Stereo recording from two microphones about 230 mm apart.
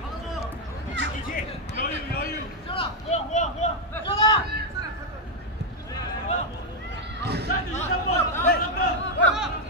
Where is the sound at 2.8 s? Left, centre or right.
Left.